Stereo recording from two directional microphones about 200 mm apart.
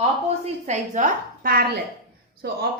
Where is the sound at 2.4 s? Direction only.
55° right (ahead or behind).